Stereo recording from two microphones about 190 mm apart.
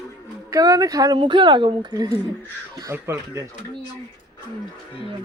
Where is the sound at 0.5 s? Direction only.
20° right (ahead or behind).